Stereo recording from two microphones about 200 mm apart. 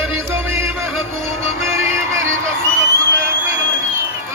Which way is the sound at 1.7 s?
15° right (ahead or behind).